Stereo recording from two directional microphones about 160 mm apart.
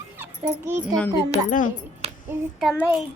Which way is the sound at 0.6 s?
15° right (ahead or behind).